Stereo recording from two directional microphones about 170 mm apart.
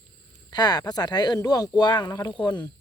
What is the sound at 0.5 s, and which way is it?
Speech, 25° left (ahead or behind).